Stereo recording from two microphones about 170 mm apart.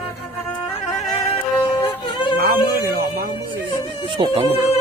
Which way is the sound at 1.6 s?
25° left (ahead or behind).